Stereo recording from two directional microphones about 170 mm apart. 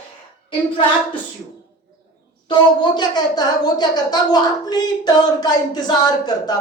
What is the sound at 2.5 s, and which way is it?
A woman's voice, 25° left (ahead or behind).